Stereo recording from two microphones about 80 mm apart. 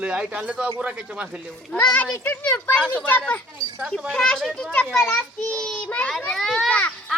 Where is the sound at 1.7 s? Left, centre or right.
Left.